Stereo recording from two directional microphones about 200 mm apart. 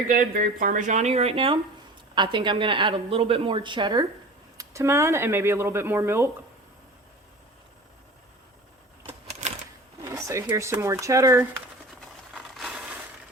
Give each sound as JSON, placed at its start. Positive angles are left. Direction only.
{"t": 0.1, "sound": "a woman's voice", "side_deg": -45}
{"t": 9.0, "sound": "typewriter", "side_deg": -35}
{"t": 10.0, "sound": "speech", "side_deg": -15}
{"t": 11.9, "sound": "a sound", "side_deg": 0}